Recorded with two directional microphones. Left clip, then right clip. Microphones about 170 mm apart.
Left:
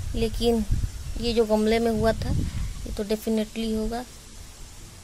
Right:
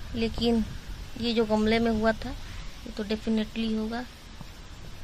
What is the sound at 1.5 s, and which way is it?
Speech, 65° left (ahead or behind).